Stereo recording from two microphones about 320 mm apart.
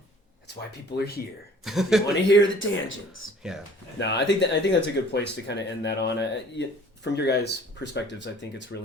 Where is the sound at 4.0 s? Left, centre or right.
Left.